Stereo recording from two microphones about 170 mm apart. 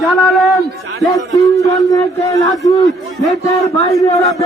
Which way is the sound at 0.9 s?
20° left (ahead or behind).